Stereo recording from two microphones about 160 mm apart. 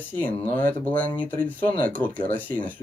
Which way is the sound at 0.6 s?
10° left (ahead or behind).